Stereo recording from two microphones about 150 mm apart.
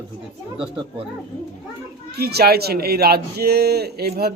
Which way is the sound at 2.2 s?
90° right.